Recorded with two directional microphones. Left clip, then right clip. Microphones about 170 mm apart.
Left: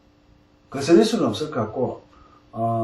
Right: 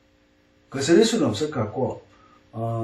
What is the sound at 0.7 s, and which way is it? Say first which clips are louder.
A man's voice: left 1 dB; 15° left (ahead or behind).